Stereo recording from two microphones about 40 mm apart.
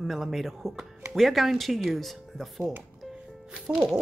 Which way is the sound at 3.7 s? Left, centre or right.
Centre.